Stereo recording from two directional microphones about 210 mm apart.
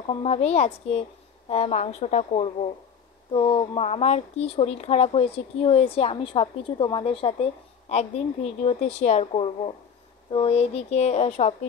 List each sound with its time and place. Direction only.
0.1 s a woman's voice: 30° left (ahead or behind)